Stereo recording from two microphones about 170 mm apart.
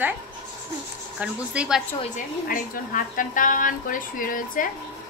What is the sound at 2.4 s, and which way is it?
A woman's voice, 55° left (ahead or behind).